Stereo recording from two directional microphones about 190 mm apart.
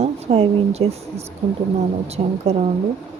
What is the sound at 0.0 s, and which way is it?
Speech, 35° right (ahead or behind).